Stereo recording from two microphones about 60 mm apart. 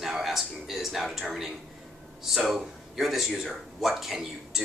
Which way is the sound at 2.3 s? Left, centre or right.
Centre.